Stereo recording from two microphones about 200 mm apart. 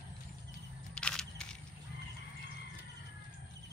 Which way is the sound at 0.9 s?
5° left (ahead or behind).